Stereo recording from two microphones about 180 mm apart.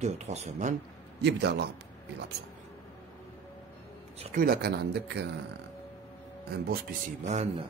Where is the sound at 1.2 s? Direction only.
70° right (ahead or behind).